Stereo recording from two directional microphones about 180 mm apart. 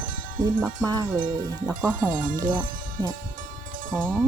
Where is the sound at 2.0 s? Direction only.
50° right (ahead or behind).